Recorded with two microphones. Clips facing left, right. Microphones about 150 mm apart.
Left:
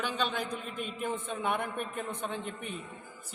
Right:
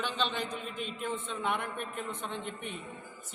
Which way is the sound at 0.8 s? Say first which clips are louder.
Left 2 dB; 50° left (ahead or behind).